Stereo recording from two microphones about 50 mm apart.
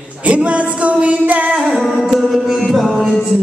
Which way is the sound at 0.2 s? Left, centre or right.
Right.